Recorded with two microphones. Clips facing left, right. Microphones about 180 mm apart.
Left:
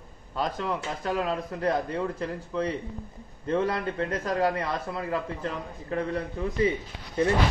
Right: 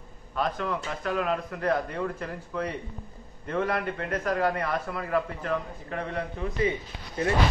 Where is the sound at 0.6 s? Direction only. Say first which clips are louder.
Left 1 dB; 30° left (ahead or behind).